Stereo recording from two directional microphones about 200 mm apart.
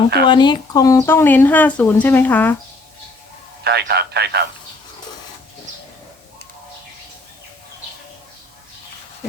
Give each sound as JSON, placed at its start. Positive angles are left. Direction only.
{"t": 0.3, "sound": "speech", "side_deg": 20}
{"t": 3.6, "sound": "a man's voice", "side_deg": -55}